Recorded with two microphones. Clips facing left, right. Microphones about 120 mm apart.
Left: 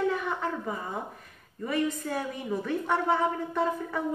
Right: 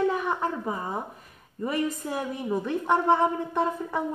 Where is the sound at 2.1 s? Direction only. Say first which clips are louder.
Right 3 dB; 20° right (ahead or behind).